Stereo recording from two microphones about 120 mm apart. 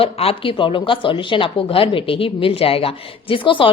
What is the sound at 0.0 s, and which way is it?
Speech, 50° left (ahead or behind).